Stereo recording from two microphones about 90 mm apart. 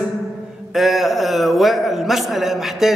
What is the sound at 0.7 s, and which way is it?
A man's voice, 5° right (ahead or behind).